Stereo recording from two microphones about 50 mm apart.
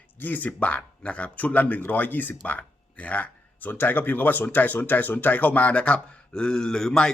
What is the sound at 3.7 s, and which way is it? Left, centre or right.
Speech, left.